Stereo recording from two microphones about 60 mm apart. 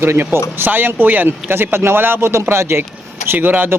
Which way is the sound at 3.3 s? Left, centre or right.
Right.